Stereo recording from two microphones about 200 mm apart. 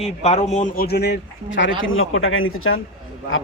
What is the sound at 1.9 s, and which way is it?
Speech, 80° left.